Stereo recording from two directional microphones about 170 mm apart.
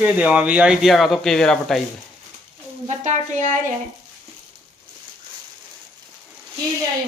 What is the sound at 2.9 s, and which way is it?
Speech, 45° right (ahead or behind).